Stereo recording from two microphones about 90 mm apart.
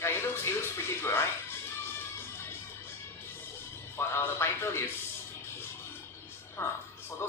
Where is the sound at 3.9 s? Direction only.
30° left (ahead or behind).